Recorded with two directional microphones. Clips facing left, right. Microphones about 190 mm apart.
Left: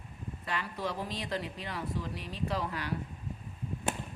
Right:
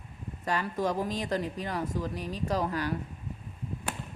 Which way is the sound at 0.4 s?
40° right (ahead or behind).